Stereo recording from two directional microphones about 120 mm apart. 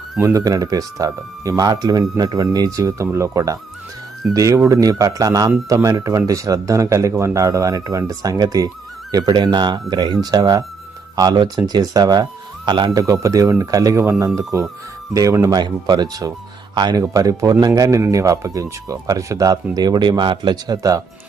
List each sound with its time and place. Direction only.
0.2 s speech: 25° right (ahead or behind)
13.0 s speech: 25° right (ahead or behind)